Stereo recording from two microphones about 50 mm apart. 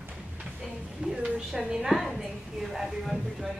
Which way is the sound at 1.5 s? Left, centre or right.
Centre.